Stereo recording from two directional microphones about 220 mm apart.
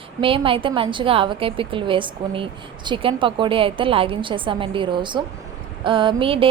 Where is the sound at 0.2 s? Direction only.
25° right (ahead or behind).